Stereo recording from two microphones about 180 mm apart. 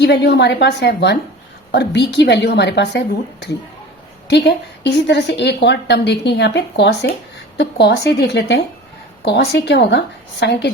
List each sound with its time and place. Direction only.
0.0 s a woman's voice: 70° left (ahead or behind)
4.3 s a woman's voice: 70° left (ahead or behind)